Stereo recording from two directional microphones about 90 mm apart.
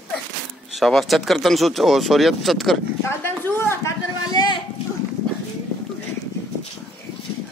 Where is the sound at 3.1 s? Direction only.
25° left (ahead or behind).